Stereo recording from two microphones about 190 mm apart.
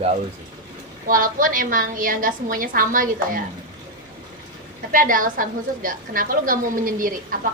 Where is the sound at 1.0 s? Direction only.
45° right (ahead or behind).